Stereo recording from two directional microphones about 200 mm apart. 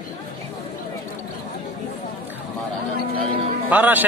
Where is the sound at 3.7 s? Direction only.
10° right (ahead or behind).